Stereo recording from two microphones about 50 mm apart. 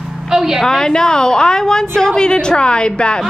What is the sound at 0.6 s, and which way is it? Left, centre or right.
A woman's voice, centre.